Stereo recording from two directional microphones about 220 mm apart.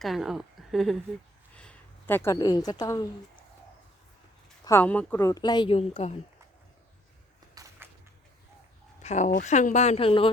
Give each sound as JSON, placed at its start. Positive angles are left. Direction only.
{"t": 0.0, "sound": "a woman's voice", "side_deg": 0}
{"t": 4.6, "sound": "speech", "side_deg": 10}
{"t": 7.5, "sound": "a sound", "side_deg": -15}
{"t": 9.0, "sound": "speech", "side_deg": 30}